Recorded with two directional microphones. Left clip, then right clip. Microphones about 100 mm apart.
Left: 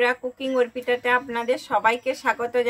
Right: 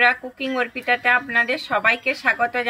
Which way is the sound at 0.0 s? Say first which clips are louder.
Right 4 dB; 55° left (ahead or behind).